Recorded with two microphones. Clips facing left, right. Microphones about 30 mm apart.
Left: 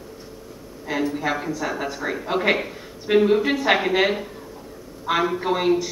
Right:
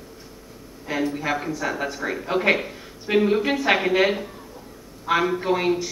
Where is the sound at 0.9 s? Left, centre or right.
Centre.